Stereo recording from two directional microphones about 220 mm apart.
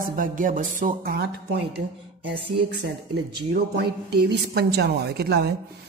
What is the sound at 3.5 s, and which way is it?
Speech, 50° right (ahead or behind).